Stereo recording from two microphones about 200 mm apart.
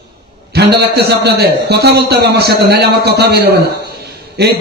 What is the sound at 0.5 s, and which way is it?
A man's voice, 55° right (ahead or behind).